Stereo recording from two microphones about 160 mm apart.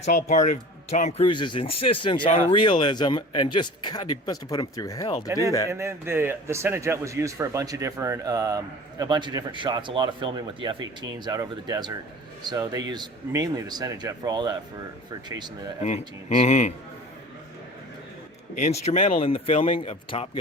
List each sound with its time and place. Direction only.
0.3 s speech: 50° left (ahead or behind); by 5.3 s 25° left (ahead or behind)
5.6 s a man's voice: 15° right (ahead or behind)
16.4 s speech: 45° left (ahead or behind)
18.5 s speech: 45° left (ahead or behind)